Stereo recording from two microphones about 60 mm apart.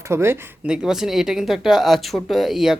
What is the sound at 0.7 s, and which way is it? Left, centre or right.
Speech, centre.